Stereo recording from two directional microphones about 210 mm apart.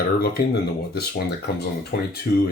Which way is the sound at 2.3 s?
45° left (ahead or behind).